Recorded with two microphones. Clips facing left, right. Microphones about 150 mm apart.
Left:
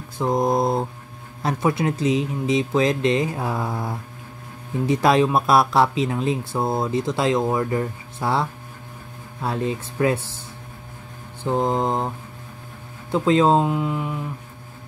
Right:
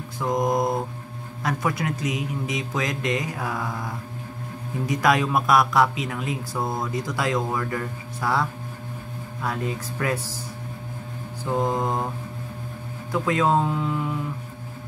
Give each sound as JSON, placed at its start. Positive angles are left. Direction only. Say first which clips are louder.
{"t": 0.2, "sound": "speech", "louder": "left 3 dB", "side_deg": 30}
{"t": 11.5, "sound": "speech", "louder": "left 3 dB", "side_deg": 25}
{"t": 13.1, "sound": "speech", "louder": "left 5 dB", "side_deg": 25}